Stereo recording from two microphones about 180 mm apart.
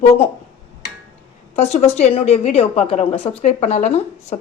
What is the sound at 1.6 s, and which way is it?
A woman's voice, 40° left (ahead or behind).